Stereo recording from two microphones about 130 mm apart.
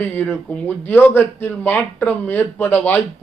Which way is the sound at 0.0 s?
15° left (ahead or behind).